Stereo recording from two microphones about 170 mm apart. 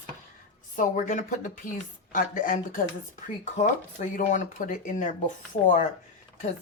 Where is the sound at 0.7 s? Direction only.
50° left (ahead or behind).